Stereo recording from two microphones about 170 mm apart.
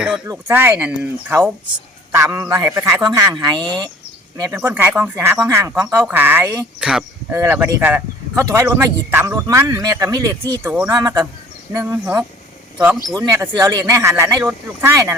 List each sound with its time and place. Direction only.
0.3 s speech: 15° right (ahead or behind)
3.4 s speech: 25° right (ahead or behind)
4.6 s speech: 10° right (ahead or behind)
6.7 s speech: 5° right (ahead or behind)